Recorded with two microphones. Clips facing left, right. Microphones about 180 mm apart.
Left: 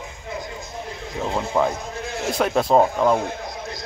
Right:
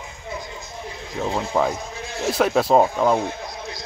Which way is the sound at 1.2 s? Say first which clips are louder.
Even; centre (ahead or behind).